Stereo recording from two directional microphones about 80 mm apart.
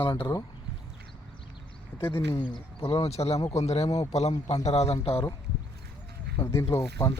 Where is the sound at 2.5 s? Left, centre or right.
Left.